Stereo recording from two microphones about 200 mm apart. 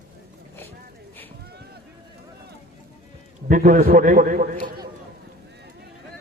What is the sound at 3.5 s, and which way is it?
Speech, 40° right (ahead or behind).